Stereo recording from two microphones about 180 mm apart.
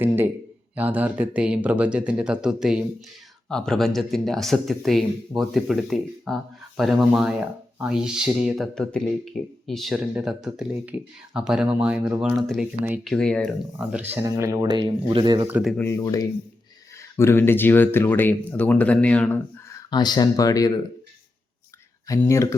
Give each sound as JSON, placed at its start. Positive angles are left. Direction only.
{"t": 0.8, "sound": "speech", "side_deg": -10}
{"t": 13.1, "sound": "speech", "side_deg": 5}
{"t": 13.9, "sound": "speech", "side_deg": -10}
{"t": 15.4, "sound": "speech", "side_deg": -10}
{"t": 15.8, "sound": "speech", "side_deg": 15}
{"t": 19.9, "sound": "speech", "side_deg": 25}
{"t": 22.2, "sound": "speech", "side_deg": 15}